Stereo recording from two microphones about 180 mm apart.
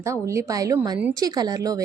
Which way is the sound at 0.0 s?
15° right (ahead or behind).